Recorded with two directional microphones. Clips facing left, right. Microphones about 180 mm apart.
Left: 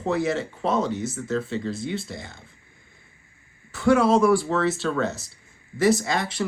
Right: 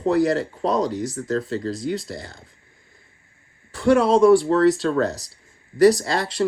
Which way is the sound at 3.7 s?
30° right (ahead or behind).